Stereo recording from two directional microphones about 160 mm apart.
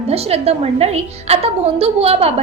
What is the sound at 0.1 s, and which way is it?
A woman's voice, 40° right (ahead or behind).